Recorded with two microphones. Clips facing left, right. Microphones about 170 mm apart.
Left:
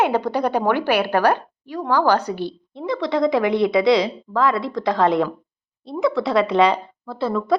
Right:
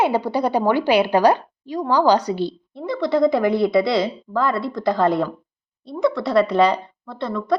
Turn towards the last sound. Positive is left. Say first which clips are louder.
# left 2 dB
turn(degrees=5)  # may be behind; listen again after turning